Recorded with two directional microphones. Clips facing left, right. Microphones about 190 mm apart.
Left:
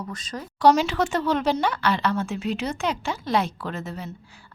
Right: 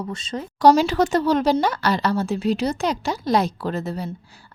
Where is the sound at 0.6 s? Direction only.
35° right (ahead or behind).